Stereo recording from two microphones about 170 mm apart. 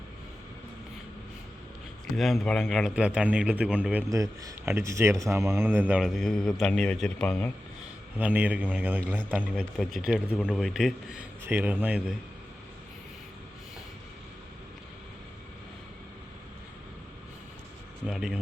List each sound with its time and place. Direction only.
2.1 s a man's voice: centre (ahead or behind)
4.1 s a man's voice: 20° right (ahead or behind); by 7.5 s 10° left (ahead or behind)
8.2 s a man's voice: 10° right (ahead or behind)
9.7 s a man's voice: centre (ahead or behind)
18.0 s speech: 5° right (ahead or behind)